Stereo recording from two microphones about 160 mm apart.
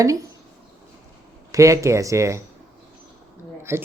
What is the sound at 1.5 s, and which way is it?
Speech, 20° right (ahead or behind).